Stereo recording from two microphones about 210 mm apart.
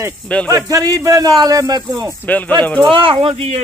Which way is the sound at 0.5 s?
15° right (ahead or behind).